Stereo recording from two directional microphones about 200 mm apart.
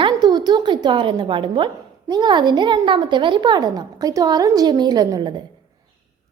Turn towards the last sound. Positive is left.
turn(degrees=-20)  # may be behind; listen again after turning